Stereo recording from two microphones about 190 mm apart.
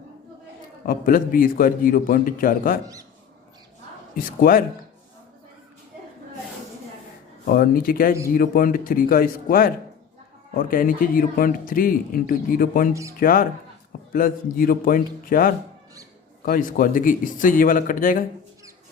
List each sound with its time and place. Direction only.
0.9 s a man's voice: 50° left (ahead or behind)
4.1 s a man's voice: 50° left (ahead or behind)
7.4 s a man's voice: 50° left (ahead or behind)
12.9 s speech: 15° right (ahead or behind)
13.1 s a man's voice: 50° left (ahead or behind)